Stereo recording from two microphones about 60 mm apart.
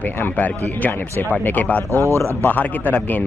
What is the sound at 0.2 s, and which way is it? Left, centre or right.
Speech, left.